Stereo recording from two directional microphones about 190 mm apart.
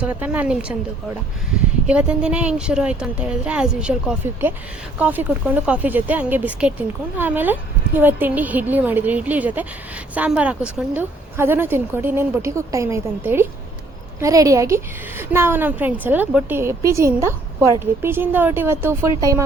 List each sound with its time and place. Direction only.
0.0 s a woman's voice: 10° right (ahead or behind)
1.9 s a woman's voice: 5° right (ahead or behind)